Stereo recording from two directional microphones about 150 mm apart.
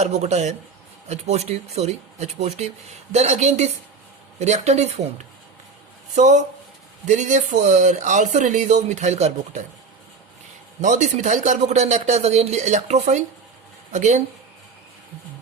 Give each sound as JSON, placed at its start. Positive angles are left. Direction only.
{"t": 0.0, "sound": "speech", "side_deg": -50}
{"t": 10.8, "sound": "speech", "side_deg": -55}